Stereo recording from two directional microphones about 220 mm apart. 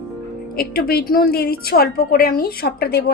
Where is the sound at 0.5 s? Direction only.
45° left (ahead or behind).